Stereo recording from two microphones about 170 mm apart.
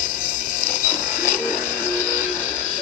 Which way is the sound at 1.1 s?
50° left (ahead or behind).